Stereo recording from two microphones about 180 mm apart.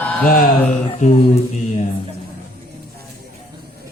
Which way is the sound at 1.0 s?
40° left (ahead or behind).